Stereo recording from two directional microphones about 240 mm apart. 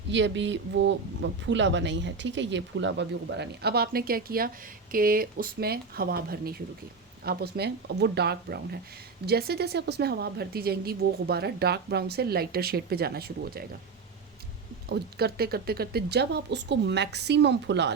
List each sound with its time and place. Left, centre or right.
0.1 s speech: right
14.8 s speech: right